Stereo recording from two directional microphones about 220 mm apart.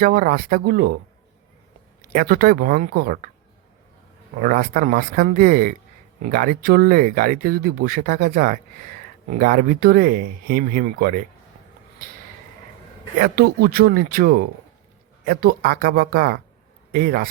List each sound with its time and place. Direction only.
0.0 s speech: 40° right (ahead or behind)
2.1 s speech: 40° right (ahead or behind)
4.4 s speech: 40° right (ahead or behind)
13.1 s speech: 40° right (ahead or behind)